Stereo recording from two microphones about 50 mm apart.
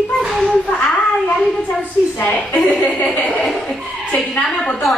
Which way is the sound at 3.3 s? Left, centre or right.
Centre.